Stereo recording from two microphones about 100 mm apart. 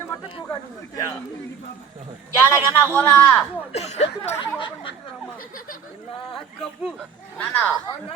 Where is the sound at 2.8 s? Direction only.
25° left (ahead or behind).